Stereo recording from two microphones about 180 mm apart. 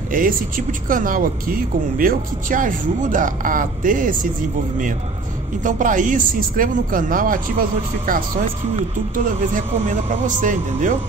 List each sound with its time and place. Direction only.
0.1 s speech: 50° right (ahead or behind)
5.6 s speech: 45° right (ahead or behind)